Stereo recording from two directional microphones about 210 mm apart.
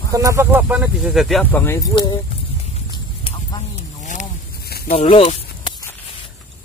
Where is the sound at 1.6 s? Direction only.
15° left (ahead or behind).